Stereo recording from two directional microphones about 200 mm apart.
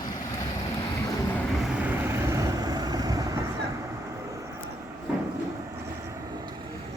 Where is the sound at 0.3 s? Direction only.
20° left (ahead or behind).